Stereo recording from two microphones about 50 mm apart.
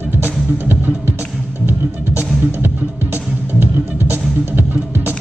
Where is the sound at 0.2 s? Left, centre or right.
Right.